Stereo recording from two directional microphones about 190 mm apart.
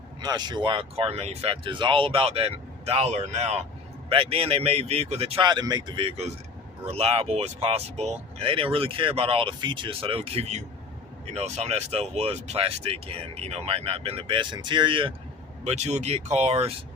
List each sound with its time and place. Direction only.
0.2 s speech: 20° right (ahead or behind)